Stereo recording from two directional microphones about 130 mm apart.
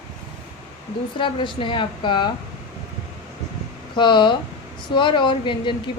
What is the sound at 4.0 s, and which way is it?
Speech, 35° left (ahead or behind).